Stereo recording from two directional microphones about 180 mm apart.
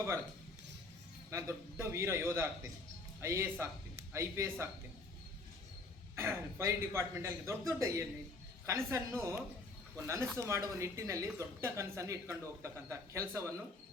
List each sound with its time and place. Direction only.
1.3 s speech: 15° right (ahead or behind)
6.1 s speech: 15° right (ahead or behind)